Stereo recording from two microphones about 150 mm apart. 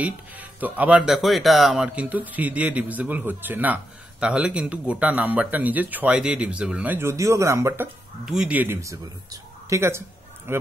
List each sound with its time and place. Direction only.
0.0 s speech: 10° right (ahead or behind)